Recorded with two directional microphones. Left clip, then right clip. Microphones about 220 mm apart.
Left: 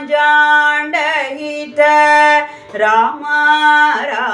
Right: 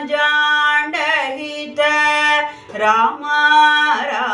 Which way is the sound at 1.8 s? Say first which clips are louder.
Left 6 dB; 20° left (ahead or behind).